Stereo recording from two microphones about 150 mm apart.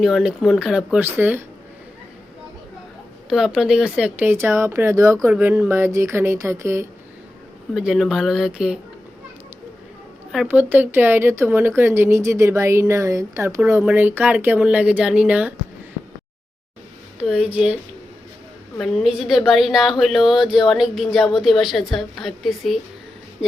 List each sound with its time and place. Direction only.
0.0 s a woman's voice: 5° right (ahead or behind)
3.2 s speech: 5° right (ahead or behind)
7.7 s a woman's voice: 5° right (ahead or behind)
10.5 s speech: 10° right (ahead or behind)
17.5 s speech: 10° right (ahead or behind)
18.8 s a woman's voice: centre (ahead or behind)